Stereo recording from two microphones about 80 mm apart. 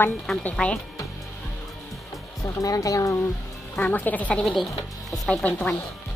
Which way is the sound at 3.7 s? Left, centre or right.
Left.